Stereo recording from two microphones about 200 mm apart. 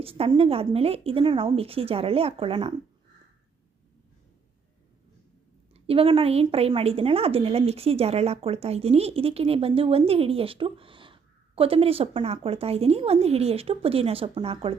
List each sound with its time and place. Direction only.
0.0 s a woman's voice: 30° right (ahead or behind)
5.7 s a woman's voice: 30° right (ahead or behind)